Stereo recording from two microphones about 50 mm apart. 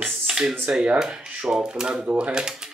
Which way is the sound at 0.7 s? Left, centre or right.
Centre.